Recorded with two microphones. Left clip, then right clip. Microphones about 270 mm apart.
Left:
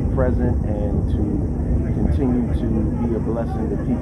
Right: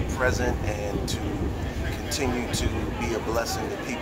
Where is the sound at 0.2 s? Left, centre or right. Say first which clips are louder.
Left 2 dB; right.